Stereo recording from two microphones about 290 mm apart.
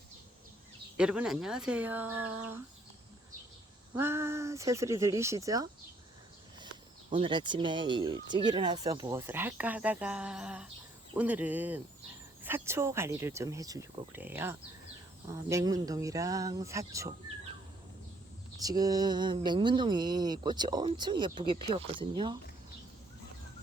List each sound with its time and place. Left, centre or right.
0.9 s speech: centre
3.9 s speech: centre
7.1 s speech: centre
18.6 s speech: centre